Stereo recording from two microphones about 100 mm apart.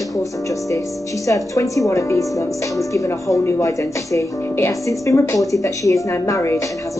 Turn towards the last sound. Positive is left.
turn(degrees=30)  # may be behind; listen again after turning